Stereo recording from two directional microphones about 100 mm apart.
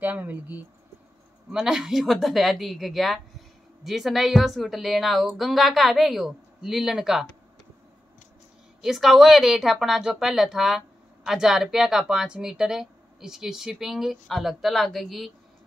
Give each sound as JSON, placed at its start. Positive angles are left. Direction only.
{"t": 0.0, "sound": "speech", "side_deg": -15}
{"t": 1.5, "sound": "speech", "side_deg": -5}
{"t": 8.8, "sound": "speech", "side_deg": 0}